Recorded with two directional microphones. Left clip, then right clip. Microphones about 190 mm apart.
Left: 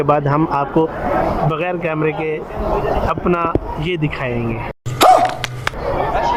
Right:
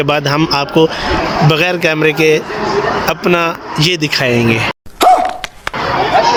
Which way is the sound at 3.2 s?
20° right (ahead or behind).